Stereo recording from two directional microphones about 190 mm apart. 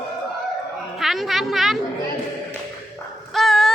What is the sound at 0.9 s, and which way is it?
Speech, centre (ahead or behind).